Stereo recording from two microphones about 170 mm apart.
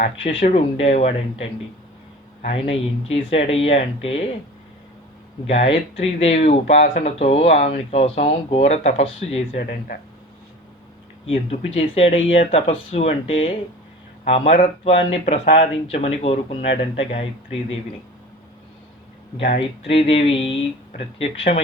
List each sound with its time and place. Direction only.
0.4 s speech: 35° left (ahead or behind)
5.5 s speech: 40° left (ahead or behind)
9.6 s speech: 55° left (ahead or behind)
11.3 s speech: 35° left (ahead or behind)
19.9 s speech: 35° left (ahead or behind)